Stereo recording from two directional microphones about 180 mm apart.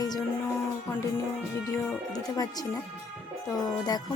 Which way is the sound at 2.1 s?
20° left (ahead or behind).